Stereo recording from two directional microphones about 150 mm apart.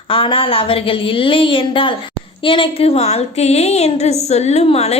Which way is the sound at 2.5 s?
35° left (ahead or behind).